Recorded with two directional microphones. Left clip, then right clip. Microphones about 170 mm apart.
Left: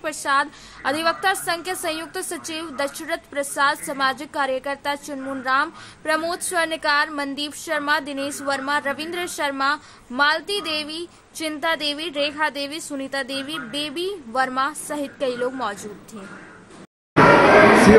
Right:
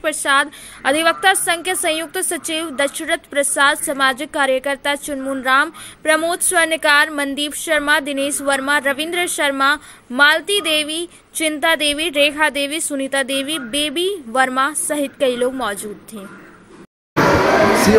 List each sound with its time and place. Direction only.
0.0 s a woman's voice: 15° right (ahead or behind)